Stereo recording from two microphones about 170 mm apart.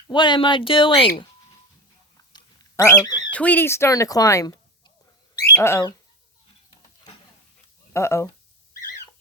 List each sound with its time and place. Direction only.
0.1 s speech: 25° left (ahead or behind)
2.3 s a sound: 20° left (ahead or behind)
3.3 s speech: 10° left (ahead or behind)
7.9 s speech: 15° left (ahead or behind)